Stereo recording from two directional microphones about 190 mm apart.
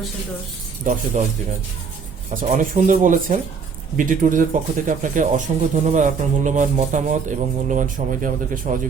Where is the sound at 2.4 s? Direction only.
45° right (ahead or behind).